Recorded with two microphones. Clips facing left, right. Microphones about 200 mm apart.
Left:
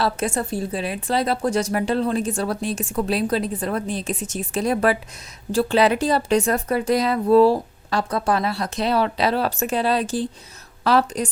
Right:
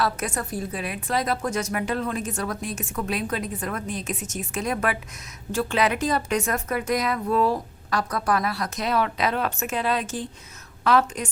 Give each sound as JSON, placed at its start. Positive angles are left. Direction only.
{"t": 0.0, "sound": "a woman's voice", "side_deg": 25}